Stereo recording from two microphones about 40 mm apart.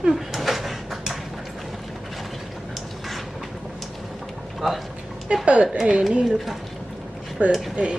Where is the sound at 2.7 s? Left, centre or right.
Centre.